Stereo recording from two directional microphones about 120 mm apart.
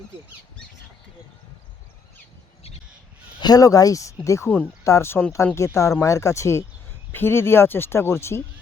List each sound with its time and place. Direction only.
3.4 s speech: 30° left (ahead or behind)